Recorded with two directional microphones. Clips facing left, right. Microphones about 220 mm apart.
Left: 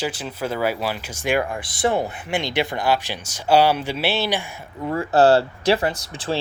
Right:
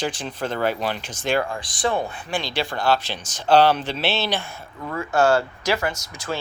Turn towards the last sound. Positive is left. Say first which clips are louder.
# left 3 dB
turn(degrees=30)  # may be behind; listen again after turning